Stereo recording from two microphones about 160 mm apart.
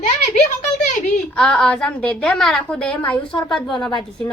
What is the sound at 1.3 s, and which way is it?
A woman's voice, 5° left (ahead or behind).